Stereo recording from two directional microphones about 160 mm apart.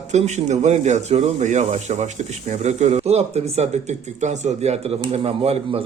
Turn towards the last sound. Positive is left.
turn(degrees=-40)  # may be behind; listen again after turning